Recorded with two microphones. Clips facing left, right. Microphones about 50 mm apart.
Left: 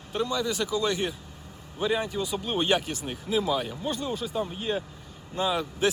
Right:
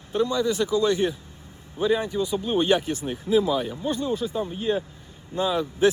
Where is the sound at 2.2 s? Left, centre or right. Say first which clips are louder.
Right 5 dB; left.